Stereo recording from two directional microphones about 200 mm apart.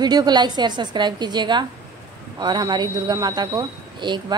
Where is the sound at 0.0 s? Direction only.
20° right (ahead or behind).